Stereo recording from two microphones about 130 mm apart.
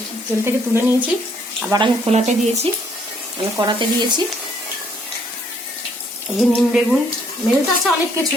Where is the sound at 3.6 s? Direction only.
35° right (ahead or behind).